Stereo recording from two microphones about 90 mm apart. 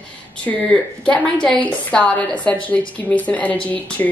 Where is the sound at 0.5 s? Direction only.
15° left (ahead or behind).